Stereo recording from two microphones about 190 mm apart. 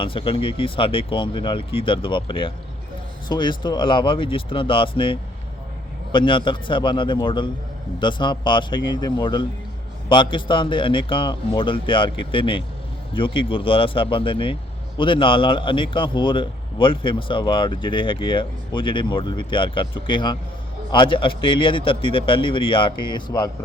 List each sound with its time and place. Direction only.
0.0 s a man's voice: 25° left (ahead or behind)